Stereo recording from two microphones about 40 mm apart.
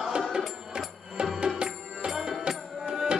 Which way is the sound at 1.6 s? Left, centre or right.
Centre.